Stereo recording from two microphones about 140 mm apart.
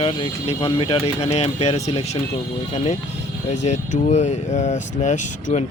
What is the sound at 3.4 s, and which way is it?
Speech, 55° left (ahead or behind).